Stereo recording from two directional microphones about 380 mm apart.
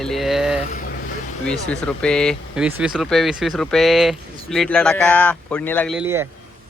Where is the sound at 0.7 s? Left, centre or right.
Left.